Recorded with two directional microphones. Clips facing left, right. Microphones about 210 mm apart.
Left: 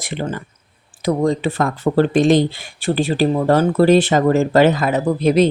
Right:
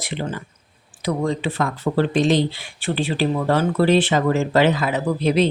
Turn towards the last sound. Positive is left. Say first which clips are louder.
# left 4 dB
turn(degrees=45)  # may be behind; listen again after turning